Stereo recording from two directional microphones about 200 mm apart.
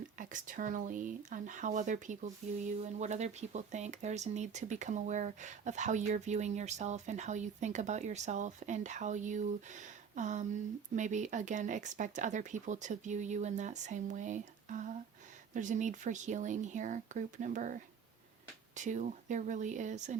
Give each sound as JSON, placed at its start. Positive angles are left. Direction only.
{"t": 0.2, "sound": "speech", "side_deg": -40}
{"t": 18.8, "sound": "speech", "side_deg": -40}